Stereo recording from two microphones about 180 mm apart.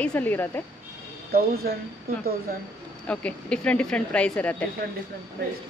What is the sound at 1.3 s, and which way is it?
Speech, 55° right (ahead or behind).